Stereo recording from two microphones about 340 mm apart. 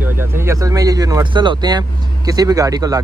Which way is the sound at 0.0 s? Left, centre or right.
Centre.